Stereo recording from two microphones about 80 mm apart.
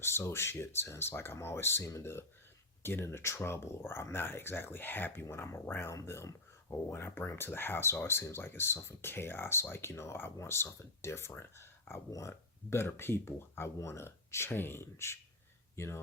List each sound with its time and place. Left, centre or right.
0.0 s speech: left
5.2 s speech: left